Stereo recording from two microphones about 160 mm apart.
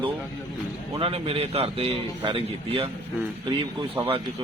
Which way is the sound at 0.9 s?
35° right (ahead or behind).